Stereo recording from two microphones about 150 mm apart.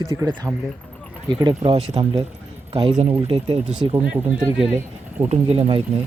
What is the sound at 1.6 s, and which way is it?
Speech, 45° right (ahead or behind).